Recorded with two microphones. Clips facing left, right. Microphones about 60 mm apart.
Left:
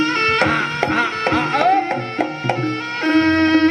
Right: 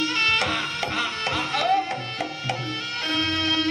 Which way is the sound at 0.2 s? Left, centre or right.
Left.